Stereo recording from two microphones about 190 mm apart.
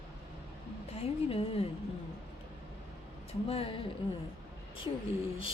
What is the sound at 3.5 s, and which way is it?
Speech, 30° left (ahead or behind).